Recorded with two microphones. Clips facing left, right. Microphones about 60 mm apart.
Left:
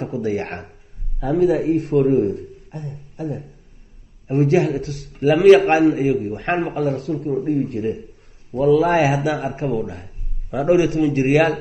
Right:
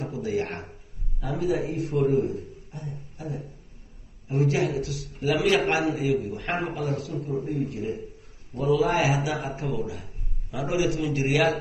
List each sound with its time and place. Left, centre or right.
0.0 s a man's voice: left
4.3 s a man's voice: left